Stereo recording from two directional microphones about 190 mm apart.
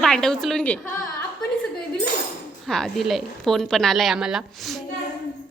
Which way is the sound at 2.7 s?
Centre (ahead or behind).